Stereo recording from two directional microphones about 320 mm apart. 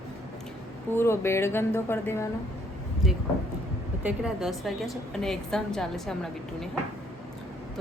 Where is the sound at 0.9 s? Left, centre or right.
Centre.